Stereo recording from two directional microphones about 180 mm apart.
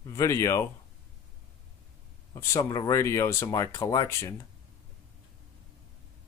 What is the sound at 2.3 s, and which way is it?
Speech, 15° left (ahead or behind).